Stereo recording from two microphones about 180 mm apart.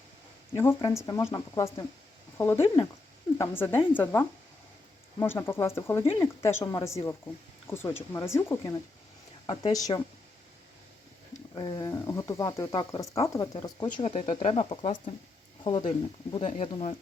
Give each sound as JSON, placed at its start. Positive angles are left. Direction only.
{"t": 0.5, "sound": "speech", "side_deg": 15}
{"t": 3.3, "sound": "speech", "side_deg": 15}
{"t": 11.5, "sound": "speech", "side_deg": 25}